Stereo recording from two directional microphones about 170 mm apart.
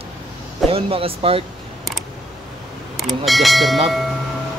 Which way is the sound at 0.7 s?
35° right (ahead or behind).